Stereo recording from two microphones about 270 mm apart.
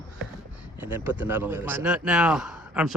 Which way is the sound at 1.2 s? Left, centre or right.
Centre.